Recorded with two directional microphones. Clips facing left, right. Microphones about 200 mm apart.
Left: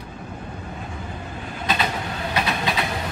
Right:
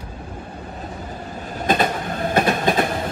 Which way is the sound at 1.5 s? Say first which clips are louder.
Right 5 dB; 45° right (ahead or behind).